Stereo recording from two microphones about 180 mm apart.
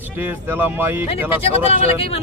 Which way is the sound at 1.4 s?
35° left (ahead or behind).